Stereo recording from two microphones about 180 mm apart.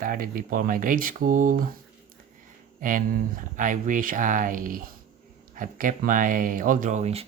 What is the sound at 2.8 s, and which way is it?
Speech, 50° right (ahead or behind).